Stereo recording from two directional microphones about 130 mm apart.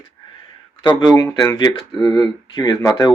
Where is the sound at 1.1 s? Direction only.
25° left (ahead or behind).